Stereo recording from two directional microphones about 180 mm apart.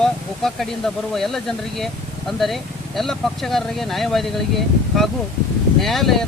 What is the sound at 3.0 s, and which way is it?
Speech, centre (ahead or behind).